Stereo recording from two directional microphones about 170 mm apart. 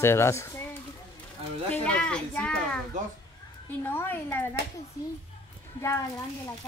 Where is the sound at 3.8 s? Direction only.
15° left (ahead or behind).